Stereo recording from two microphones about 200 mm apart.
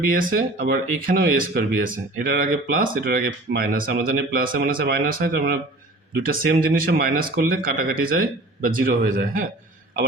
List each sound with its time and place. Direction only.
0.1 s speech: 45° right (ahead or behind)